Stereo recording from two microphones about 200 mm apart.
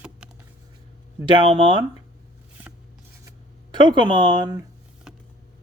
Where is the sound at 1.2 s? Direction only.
25° right (ahead or behind).